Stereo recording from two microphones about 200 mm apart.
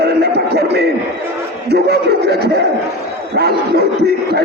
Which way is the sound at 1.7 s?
55° right (ahead or behind).